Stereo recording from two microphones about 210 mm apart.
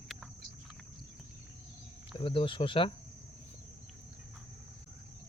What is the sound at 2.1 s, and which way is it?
Speech, 25° left (ahead or behind).